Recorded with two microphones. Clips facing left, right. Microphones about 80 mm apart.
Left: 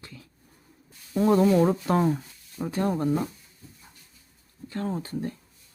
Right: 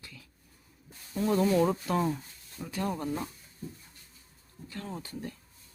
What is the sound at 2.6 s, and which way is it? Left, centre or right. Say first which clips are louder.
Speech: left 7 dB; left.